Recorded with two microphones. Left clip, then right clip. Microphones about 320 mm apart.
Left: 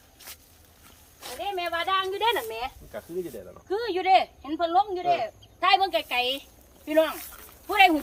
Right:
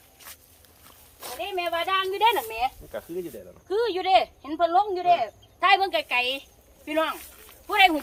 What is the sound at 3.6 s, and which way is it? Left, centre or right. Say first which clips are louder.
Speech: even; right.